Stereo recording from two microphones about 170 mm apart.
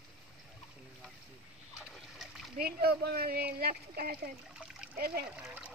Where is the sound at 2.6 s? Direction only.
65° right (ahead or behind).